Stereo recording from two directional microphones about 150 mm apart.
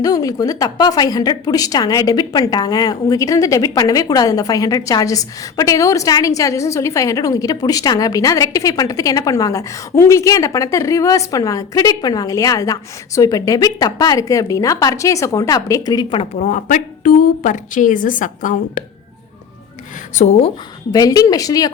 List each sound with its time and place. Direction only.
0.0 s a woman's voice: 25° left (ahead or behind)
16.4 s a woman's voice: 55° left (ahead or behind)
20.1 s speech: 50° left (ahead or behind)
20.9 s a woman's voice: 25° left (ahead or behind)